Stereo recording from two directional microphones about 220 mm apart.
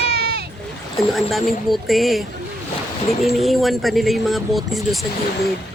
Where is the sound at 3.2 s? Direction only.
Centre (ahead or behind).